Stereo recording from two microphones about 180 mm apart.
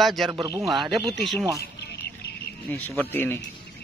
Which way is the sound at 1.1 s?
Centre (ahead or behind).